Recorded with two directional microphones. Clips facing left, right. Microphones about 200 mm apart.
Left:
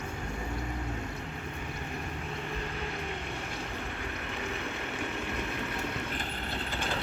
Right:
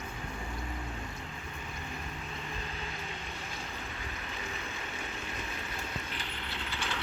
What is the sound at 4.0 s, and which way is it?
Vehicle, 60° left (ahead or behind).